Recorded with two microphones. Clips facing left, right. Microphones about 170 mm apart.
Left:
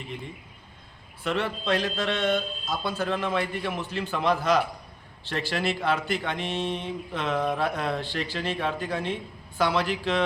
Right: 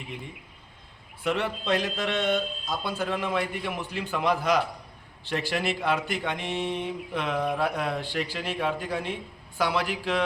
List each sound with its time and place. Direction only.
1.2 s speech: 15° right (ahead or behind)